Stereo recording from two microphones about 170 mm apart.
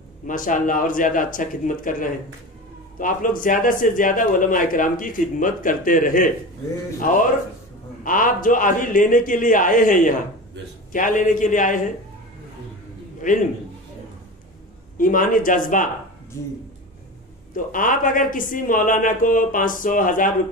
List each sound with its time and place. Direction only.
0.3 s speech: 50° left (ahead or behind)
8.0 s speech: 55° left (ahead or behind)
13.2 s speech: 50° left (ahead or behind)
15.0 s speech: 55° left (ahead or behind)
17.6 s speech: 50° left (ahead or behind)